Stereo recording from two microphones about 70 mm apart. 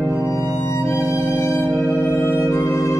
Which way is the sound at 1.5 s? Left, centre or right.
Left.